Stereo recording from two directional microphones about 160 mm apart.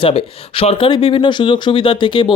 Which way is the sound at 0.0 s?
35° left (ahead or behind).